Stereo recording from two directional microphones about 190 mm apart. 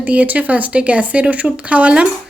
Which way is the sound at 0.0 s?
5° right (ahead or behind).